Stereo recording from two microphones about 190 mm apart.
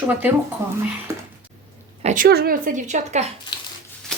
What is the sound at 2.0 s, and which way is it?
A woman's voice, 45° right (ahead or behind).